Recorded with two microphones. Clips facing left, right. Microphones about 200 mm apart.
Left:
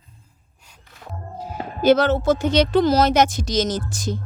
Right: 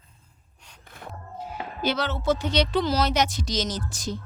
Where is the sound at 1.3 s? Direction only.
40° left (ahead or behind).